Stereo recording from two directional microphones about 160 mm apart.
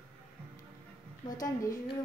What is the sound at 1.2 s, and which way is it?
Speech, 25° left (ahead or behind).